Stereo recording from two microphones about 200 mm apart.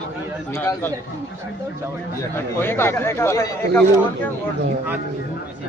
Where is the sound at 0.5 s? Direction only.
10° left (ahead or behind).